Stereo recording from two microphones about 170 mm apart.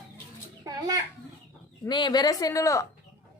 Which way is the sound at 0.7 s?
20° right (ahead or behind).